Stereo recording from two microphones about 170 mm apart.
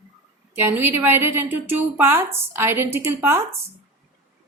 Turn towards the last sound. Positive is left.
turn(degrees=-15)  # may be behind; listen again after turning